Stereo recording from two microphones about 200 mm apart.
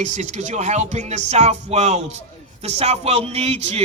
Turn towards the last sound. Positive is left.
turn(degrees=-30)  # may be behind; listen again after turning